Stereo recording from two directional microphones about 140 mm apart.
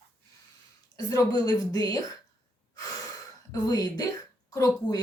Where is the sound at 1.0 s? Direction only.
25° left (ahead or behind).